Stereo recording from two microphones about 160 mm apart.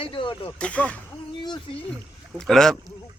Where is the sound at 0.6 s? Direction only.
10° left (ahead or behind).